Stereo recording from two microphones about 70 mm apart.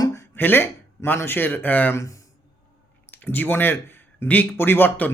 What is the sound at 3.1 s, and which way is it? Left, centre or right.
Speech, left.